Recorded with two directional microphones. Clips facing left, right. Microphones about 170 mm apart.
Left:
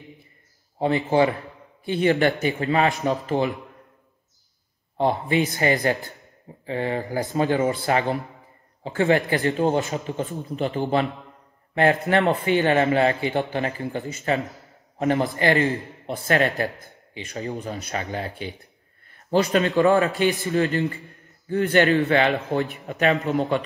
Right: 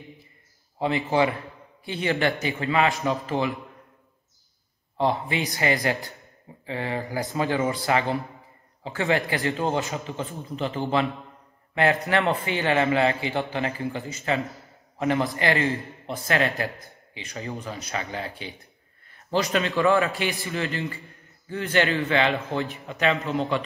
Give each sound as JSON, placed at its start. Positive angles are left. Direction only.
{"t": 0.7, "sound": "a man's voice", "side_deg": 35}
{"t": 4.9, "sound": "a man's voice", "side_deg": 40}
{"t": 16.1, "sound": "a man's voice", "side_deg": 50}
{"t": 19.4, "sound": "a man's voice", "side_deg": 40}